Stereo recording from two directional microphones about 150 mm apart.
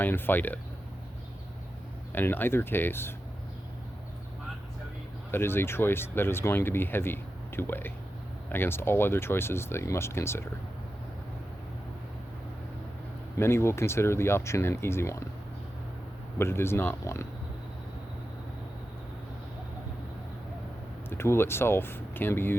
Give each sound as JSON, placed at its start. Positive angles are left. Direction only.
{"t": 0.0, "sound": "speech", "side_deg": 15}
{"t": 2.1, "sound": "speech", "side_deg": 15}
{"t": 5.3, "sound": "speech", "side_deg": 15}
{"t": 13.4, "sound": "speech", "side_deg": 15}
{"t": 16.4, "sound": "speech", "side_deg": 15}
{"t": 21.1, "sound": "speech", "side_deg": 15}